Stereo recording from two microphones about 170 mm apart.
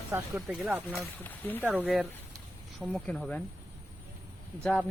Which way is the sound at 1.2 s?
10° left (ahead or behind).